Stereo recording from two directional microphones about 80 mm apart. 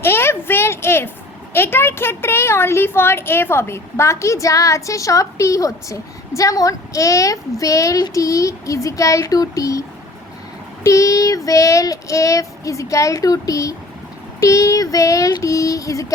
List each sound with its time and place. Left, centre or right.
0.0 s a sound: left
1.5 s a woman's voice: left
8.1 s child singing: left
10.8 s child singing: left